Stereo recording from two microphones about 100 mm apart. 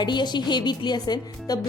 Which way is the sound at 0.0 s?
45° left (ahead or behind).